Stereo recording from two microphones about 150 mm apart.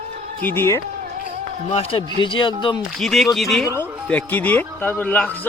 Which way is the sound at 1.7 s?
40° left (ahead or behind).